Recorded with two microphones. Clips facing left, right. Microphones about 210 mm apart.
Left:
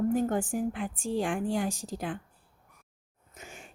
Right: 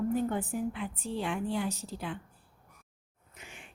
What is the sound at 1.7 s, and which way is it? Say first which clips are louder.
Speech: left 2 dB; 90° left.